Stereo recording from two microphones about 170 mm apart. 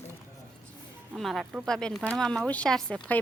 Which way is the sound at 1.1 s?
Centre (ahead or behind).